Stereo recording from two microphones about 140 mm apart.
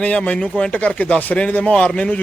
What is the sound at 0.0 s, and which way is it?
Speech, 10° left (ahead or behind).